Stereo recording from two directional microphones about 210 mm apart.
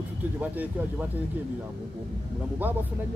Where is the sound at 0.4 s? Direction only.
5° right (ahead or behind).